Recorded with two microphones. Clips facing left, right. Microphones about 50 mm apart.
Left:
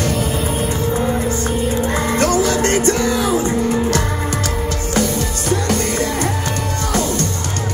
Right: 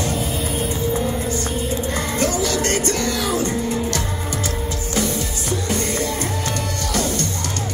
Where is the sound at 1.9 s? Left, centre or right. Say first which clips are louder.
Left 6 dB; left.